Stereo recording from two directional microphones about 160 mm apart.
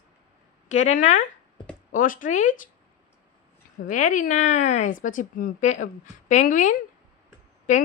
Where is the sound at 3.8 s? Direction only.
55° left (ahead or behind).